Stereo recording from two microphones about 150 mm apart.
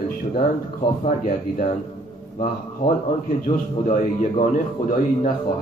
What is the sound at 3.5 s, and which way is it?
A man's voice, 50° left (ahead or behind).